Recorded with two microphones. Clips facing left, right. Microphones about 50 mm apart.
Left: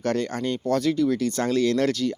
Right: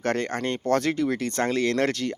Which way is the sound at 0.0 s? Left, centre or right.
Right.